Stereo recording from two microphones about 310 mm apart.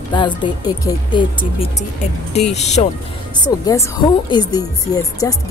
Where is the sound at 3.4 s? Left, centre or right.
Centre.